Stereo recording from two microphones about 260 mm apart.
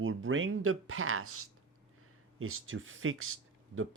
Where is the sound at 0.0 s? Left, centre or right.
Right.